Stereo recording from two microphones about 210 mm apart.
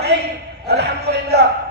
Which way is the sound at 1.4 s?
55° right (ahead or behind).